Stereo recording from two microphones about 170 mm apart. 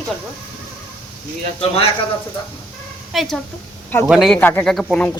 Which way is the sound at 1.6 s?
35° left (ahead or behind).